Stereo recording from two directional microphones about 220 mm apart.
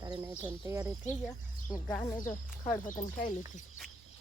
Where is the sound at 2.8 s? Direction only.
35° left (ahead or behind).